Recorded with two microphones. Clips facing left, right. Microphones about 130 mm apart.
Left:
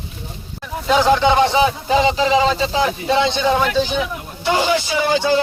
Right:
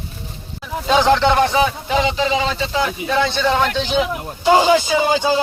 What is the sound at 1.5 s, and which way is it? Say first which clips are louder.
Speech: left 2 dB; 30° left (ahead or behind).